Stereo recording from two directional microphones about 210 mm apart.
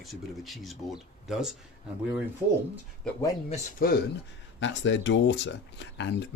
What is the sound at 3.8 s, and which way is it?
Speech, 45° left (ahead or behind).